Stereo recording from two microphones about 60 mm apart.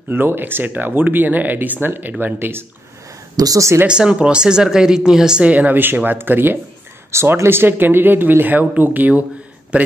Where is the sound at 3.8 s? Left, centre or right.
Centre.